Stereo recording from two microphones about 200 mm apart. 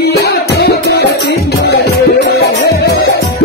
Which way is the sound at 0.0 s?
55° left (ahead or behind).